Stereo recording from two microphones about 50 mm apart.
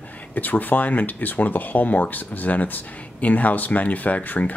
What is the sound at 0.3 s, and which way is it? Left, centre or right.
Speech, left.